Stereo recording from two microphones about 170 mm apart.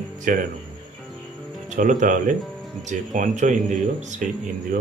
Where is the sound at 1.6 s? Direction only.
50° right (ahead or behind).